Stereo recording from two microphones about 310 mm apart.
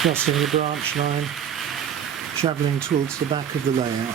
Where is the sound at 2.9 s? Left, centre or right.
Right.